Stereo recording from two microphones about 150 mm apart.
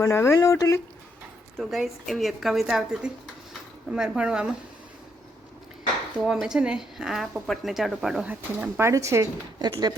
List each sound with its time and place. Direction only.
0.0 s speech: 20° left (ahead or behind)
1.5 s a woman's voice: centre (ahead or behind)
6.2 s a woman's voice: 5° right (ahead or behind); by 9.9 s 30° right (ahead or behind)